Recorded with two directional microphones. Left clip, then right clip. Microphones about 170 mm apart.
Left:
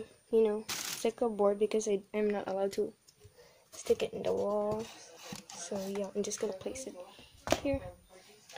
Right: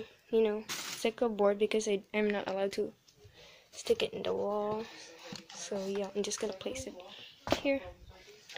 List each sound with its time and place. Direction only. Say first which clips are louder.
0.0 s speech: left 1 dB; 10° left (ahead or behind)
3.8 s speech: even; 5° left (ahead or behind)